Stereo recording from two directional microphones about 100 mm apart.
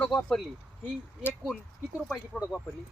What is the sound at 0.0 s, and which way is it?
Speech, 10° left (ahead or behind).